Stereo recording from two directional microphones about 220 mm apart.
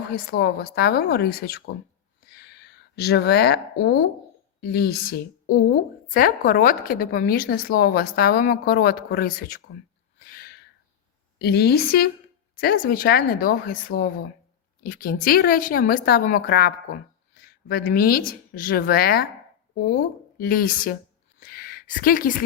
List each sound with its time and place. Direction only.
0.1 s a woman's voice: 45° left (ahead or behind)
10.2 s a sound: 40° left (ahead or behind)
11.3 s speech: 45° left (ahead or behind)